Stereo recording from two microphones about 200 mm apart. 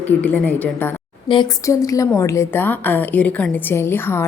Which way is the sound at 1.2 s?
25° left (ahead or behind).